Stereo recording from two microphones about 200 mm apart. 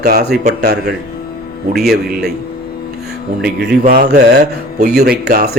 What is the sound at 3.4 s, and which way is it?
A man's voice, 55° right (ahead or behind).